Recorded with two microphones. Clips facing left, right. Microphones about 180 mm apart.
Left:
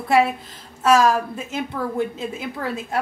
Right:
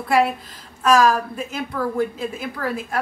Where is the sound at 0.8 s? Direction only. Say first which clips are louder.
Even; 25° left (ahead or behind).